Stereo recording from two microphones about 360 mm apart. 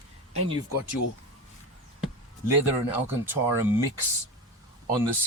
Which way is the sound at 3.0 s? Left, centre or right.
Centre.